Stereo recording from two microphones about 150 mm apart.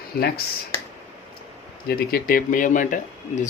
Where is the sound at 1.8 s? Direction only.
80° left; by 2.9 s 60° left (ahead or behind).